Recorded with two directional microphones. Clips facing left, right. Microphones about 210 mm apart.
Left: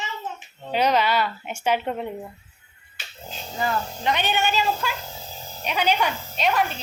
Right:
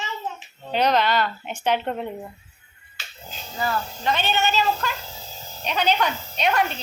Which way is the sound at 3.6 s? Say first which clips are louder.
Even; 20° left (ahead or behind).